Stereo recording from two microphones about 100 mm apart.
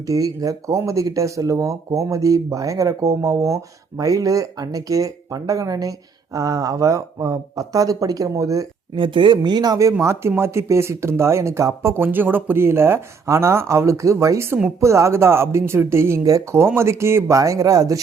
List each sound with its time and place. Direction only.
0.1 s speech: 35° right (ahead or behind)
9.0 s speech: 55° right (ahead or behind); by 9.9 s 35° right (ahead or behind)
10.0 s speech: 25° right (ahead or behind)